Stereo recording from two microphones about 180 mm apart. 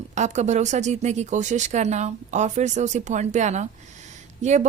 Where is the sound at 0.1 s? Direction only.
40° right (ahead or behind).